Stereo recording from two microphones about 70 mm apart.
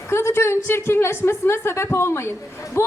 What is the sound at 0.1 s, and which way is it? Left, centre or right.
A woman's voice, left.